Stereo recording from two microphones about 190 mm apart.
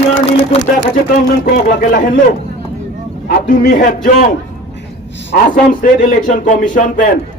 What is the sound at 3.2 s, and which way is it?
Speech, 50° left (ahead or behind).